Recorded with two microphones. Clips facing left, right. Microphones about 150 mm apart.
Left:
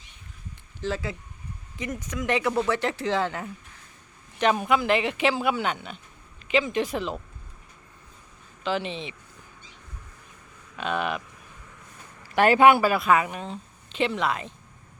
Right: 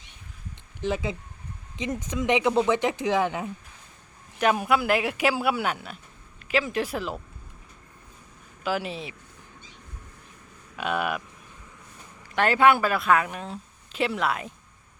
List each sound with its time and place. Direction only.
0.8 s speech: 15° right (ahead or behind)
8.6 s speech: 5° right (ahead or behind)
10.8 s speech: 5° right (ahead or behind)
12.2 s speech: 15° left (ahead or behind)
12.9 s speech: 5° left (ahead or behind)